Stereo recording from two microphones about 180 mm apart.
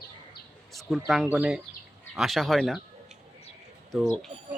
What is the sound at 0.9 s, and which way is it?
Speech, centre (ahead or behind).